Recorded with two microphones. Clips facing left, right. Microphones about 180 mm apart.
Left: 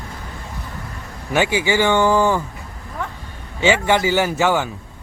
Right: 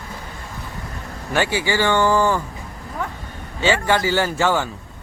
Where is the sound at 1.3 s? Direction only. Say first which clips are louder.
Left 3 dB; 15° left (ahead or behind).